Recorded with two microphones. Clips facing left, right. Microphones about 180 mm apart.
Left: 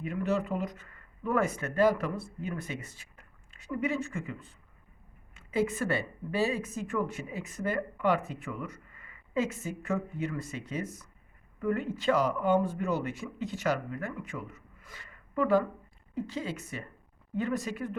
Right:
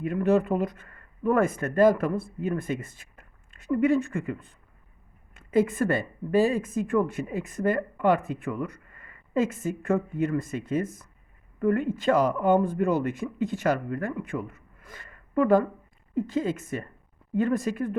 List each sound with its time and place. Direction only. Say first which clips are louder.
0.0 s a woman's voice: right 7 dB; 50° right (ahead or behind)